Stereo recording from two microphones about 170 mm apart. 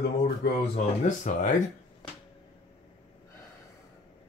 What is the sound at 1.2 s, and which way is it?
Speech, 45° left (ahead or behind).